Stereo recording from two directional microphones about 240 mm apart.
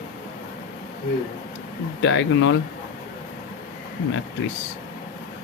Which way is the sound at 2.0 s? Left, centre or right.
Left.